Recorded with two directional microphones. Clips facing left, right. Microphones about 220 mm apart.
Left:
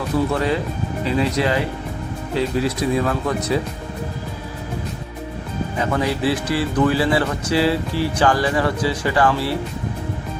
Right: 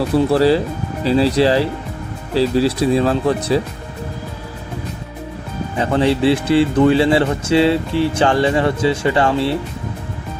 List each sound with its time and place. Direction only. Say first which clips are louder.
0.3 s speech: right 7 dB; 30° right (ahead or behind)
5.8 s speech: right 6 dB; 30° right (ahead or behind)